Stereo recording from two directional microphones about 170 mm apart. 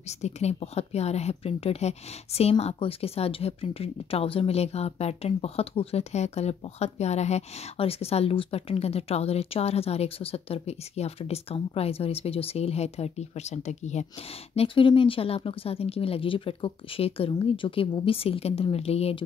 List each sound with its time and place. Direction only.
0.2 s a woman's voice: 40° left (ahead or behind)